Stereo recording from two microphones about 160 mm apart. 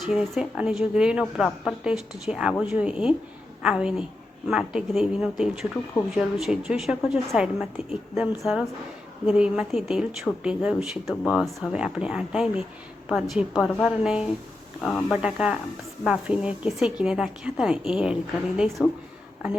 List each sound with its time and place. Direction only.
0.0 s speech: centre (ahead or behind)